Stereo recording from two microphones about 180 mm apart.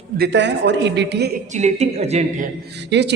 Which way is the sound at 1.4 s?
40° right (ahead or behind).